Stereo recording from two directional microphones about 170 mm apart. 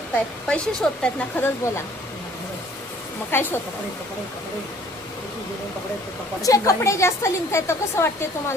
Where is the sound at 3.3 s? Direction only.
10° left (ahead or behind).